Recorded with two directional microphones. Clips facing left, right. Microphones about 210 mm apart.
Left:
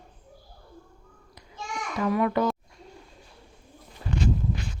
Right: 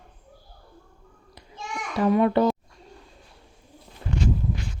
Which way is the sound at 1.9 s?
30° right (ahead or behind).